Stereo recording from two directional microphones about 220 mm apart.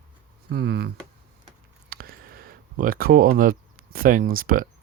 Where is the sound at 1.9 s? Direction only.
40° right (ahead or behind).